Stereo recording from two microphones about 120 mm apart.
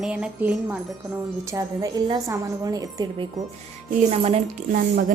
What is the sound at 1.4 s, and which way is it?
A woman's voice, 25° right (ahead or behind).